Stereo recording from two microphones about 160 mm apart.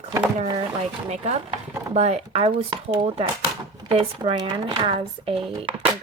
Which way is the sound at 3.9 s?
35° right (ahead or behind).